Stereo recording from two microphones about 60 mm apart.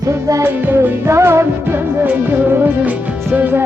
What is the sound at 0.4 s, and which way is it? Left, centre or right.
Music, right.